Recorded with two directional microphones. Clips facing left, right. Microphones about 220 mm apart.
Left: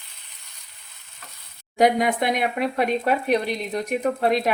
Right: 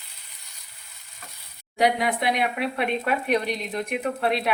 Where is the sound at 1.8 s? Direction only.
45° left (ahead or behind).